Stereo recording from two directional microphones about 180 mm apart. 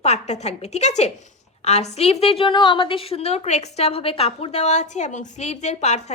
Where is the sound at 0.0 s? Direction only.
35° left (ahead or behind).